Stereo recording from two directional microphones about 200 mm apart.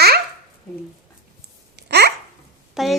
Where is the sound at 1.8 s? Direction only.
55° right (ahead or behind).